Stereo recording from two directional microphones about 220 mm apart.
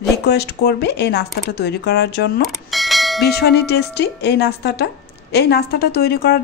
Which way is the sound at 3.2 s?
45° left (ahead or behind).